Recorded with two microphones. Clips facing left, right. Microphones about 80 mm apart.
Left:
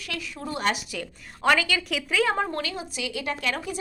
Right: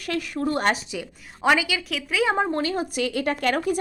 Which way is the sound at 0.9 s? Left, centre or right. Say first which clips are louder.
Right 2 dB; centre.